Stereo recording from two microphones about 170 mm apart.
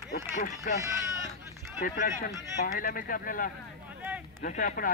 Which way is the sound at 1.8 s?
55° left (ahead or behind).